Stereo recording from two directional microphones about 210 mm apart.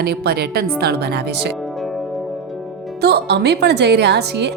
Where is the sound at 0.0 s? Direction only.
50° right (ahead or behind).